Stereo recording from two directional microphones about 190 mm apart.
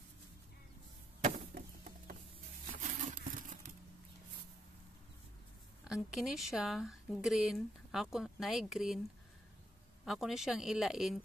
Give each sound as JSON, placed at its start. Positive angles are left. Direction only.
{"t": 1.2, "sound": "a sound", "side_deg": -40}
{"t": 2.8, "sound": "crumpling", "side_deg": -45}
{"t": 5.9, "sound": "speech", "side_deg": -5}
{"t": 10.0, "sound": "speech", "side_deg": 0}